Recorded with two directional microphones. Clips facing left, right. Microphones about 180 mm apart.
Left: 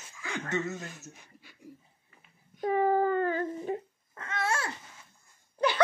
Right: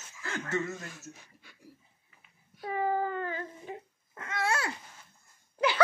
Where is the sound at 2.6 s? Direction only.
50° left (ahead or behind).